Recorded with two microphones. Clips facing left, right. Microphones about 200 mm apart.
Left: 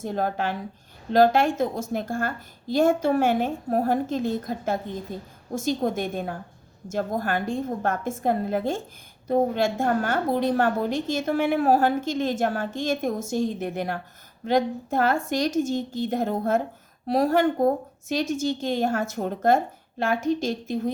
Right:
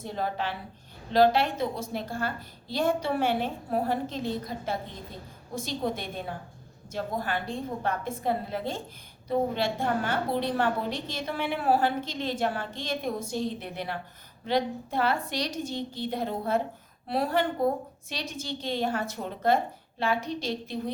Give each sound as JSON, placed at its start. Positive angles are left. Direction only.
{"t": 0.0, "sound": "a woman's voice", "side_deg": 45}